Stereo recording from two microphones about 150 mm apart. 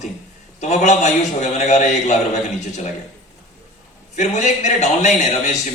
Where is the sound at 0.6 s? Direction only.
50° left (ahead or behind).